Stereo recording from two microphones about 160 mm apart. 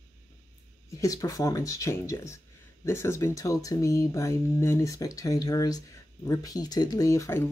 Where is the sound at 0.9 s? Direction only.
20° left (ahead or behind).